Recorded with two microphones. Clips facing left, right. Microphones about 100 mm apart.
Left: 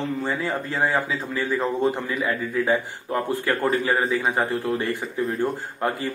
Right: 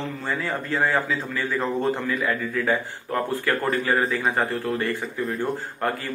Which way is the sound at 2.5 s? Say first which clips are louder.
Left 2 dB; 10° left (ahead or behind).